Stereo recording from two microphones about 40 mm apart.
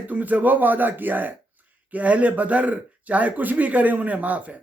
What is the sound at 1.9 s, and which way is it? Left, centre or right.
Speech, right.